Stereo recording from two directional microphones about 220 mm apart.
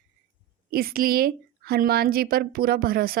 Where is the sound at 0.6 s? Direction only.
40° right (ahead or behind).